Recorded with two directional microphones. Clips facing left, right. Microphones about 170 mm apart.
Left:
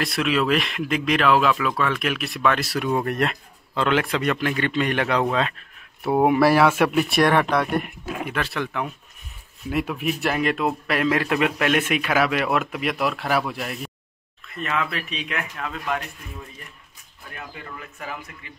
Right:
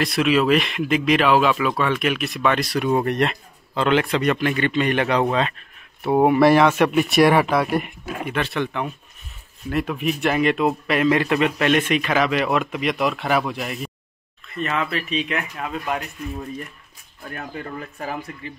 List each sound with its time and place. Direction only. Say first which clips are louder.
0.0 s speech: right 4 dB; centre (ahead or behind)
15.5 s speech: right 2 dB; 15° right (ahead or behind)
17.3 s speech: right 6 dB; 45° right (ahead or behind)